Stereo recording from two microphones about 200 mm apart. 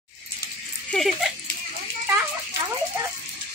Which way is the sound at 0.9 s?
Centre (ahead or behind).